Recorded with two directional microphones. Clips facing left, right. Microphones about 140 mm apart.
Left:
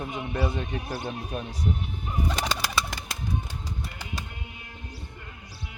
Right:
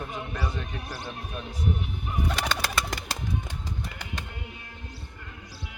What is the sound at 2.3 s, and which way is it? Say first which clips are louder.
Bird: right 1 dB; 15° left (ahead or behind).